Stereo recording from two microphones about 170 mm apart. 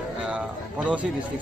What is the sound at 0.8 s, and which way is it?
Speech, 10° right (ahead or behind).